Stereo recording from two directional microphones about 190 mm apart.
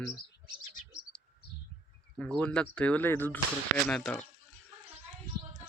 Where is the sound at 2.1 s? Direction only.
5° left (ahead or behind).